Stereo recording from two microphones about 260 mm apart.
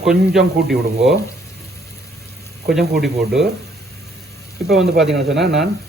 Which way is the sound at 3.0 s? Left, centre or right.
Centre.